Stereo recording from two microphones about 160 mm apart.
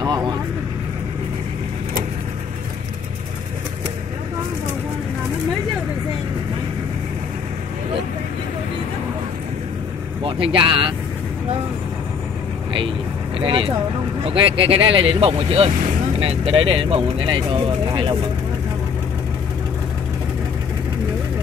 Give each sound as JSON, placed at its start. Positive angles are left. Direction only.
{"t": 0.0, "sound": "speech", "side_deg": -25}
{"t": 10.2, "sound": "speech", "side_deg": -35}
{"t": 13.4, "sound": "speech", "side_deg": -35}